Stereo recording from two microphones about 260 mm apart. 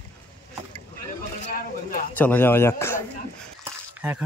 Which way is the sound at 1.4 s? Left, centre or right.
Left.